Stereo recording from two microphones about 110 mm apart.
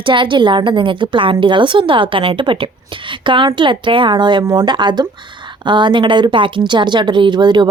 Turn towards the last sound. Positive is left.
turn(degrees=-45)  # may be behind; listen again after turning